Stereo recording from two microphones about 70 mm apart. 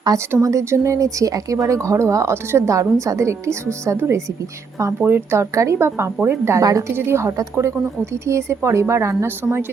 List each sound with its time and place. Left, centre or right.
0.1 s a woman's voice: right
0.4 s speech: right
4.9 s a woman's voice: right
5.4 s a woman's voice: right
6.6 s a woman's voice: right
6.9 s a woman's voice: right